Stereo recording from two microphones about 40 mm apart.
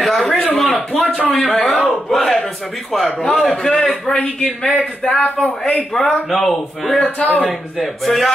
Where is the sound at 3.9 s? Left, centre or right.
Left.